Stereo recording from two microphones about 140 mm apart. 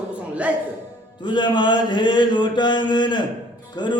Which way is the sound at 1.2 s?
35° left (ahead or behind).